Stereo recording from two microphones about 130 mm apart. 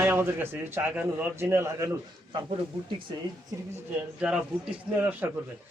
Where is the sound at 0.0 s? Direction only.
15° right (ahead or behind).